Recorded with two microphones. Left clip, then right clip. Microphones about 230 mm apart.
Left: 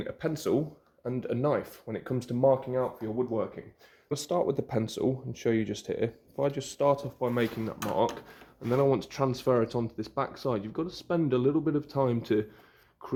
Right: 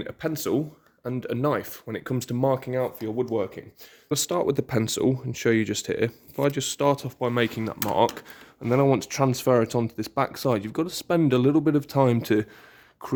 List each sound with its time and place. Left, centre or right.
0.0 s speech: right
4.1 s speech: right
13.0 s a sound: right